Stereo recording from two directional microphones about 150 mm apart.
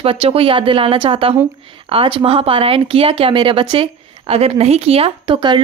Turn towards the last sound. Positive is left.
turn(degrees=-30)  # may be behind; listen again after turning